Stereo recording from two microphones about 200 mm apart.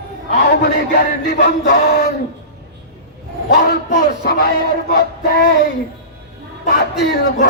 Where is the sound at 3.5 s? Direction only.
55° left (ahead or behind).